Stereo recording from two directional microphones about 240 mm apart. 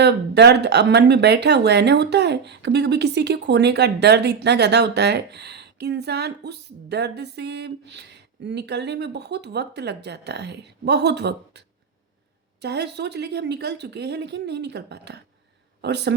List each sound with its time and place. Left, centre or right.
0.0 s speech: right
12.6 s speech: right